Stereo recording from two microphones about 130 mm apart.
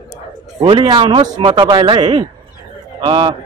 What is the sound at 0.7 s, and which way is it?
Speech, 40° right (ahead or behind).